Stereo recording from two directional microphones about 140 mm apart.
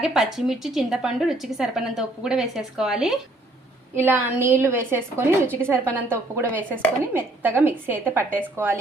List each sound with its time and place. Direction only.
0.0 s a woman's voice: 5° right (ahead or behind)
3.9 s a woman's voice: 15° right (ahead or behind)